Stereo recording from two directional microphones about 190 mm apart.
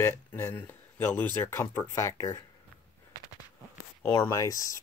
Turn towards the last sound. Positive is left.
turn(degrees=15)  # may be behind; listen again after turning